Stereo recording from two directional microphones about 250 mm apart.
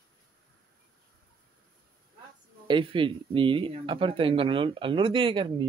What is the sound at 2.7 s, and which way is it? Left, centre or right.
Speech, centre.